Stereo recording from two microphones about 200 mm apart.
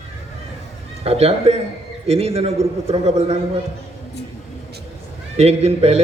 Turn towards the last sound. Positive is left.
turn(degrees=-30)  # may be behind; listen again after turning